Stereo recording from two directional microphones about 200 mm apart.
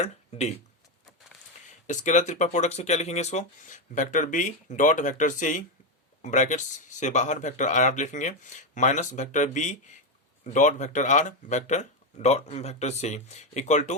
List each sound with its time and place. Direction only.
0.0 s speech: 35° left (ahead or behind)
1.9 s speech: 35° left (ahead or behind)